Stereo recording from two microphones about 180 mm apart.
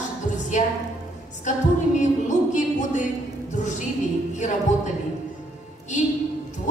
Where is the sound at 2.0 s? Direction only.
40° left (ahead or behind).